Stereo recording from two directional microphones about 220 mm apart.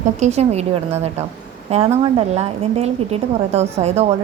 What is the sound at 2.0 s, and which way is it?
A woman's voice, 30° right (ahead or behind).